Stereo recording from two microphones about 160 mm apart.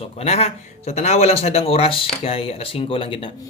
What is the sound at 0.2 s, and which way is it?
Speech, 40° left (ahead or behind).